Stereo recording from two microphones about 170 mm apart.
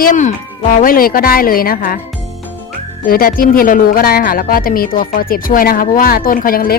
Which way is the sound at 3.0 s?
55° left (ahead or behind).